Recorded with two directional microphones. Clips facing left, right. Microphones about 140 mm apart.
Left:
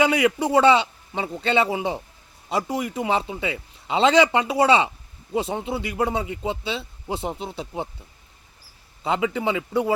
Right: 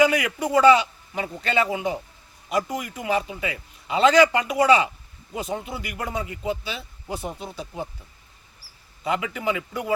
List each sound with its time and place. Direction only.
0.0 s a man's voice: 25° left (ahead or behind)
9.0 s a man's voice: 25° left (ahead or behind)